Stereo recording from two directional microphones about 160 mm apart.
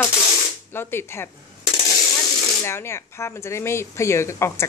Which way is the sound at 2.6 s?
15° left (ahead or behind).